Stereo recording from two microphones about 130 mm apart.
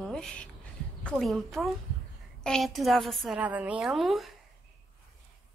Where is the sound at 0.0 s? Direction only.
5° left (ahead or behind).